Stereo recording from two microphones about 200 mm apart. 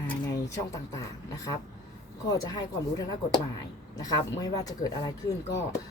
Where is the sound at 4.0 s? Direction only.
20° left (ahead or behind).